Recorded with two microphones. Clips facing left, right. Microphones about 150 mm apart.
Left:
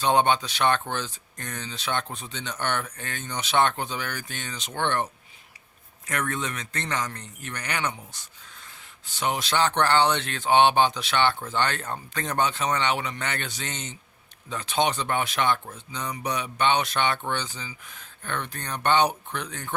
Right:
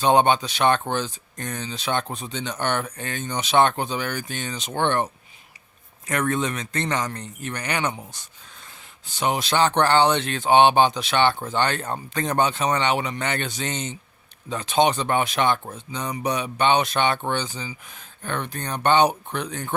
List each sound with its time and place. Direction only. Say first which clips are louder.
0.0 s speech: right 4 dB; 15° right (ahead or behind)
6.1 s speech: right 6 dB; 25° right (ahead or behind)
9.1 s speech: right 3 dB; 15° right (ahead or behind)
15.9 s speech: right 4 dB; 20° right (ahead or behind)